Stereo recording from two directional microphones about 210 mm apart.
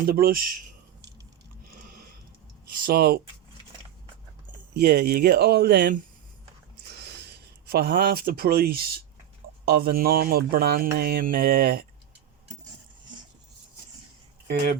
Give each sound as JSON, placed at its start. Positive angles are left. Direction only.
{"t": 0.1, "sound": "speech", "side_deg": -45}
{"t": 2.6, "sound": "speech", "side_deg": -45}
{"t": 4.7, "sound": "speech", "side_deg": -50}
{"t": 7.2, "sound": "speech", "side_deg": -50}